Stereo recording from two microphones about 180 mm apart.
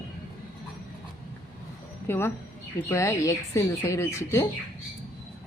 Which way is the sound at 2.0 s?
15° left (ahead or behind).